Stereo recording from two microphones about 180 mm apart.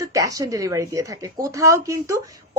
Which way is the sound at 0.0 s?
20° right (ahead or behind).